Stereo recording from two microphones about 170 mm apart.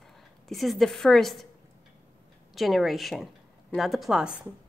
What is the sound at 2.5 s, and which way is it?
Speech, centre (ahead or behind).